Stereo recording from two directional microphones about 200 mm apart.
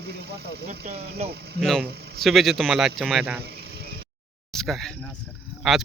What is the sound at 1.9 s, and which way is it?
Speech, 55° right (ahead or behind).